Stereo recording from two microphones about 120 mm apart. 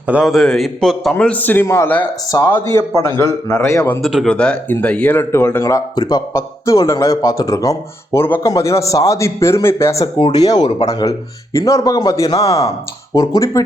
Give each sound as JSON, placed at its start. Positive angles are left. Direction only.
{"t": 0.1, "sound": "a man's voice", "side_deg": -5}
{"t": 1.1, "sound": "a man's voice", "side_deg": 15}
{"t": 4.0, "sound": "speech", "side_deg": 0}
{"t": 6.3, "sound": "a man's voice", "side_deg": 25}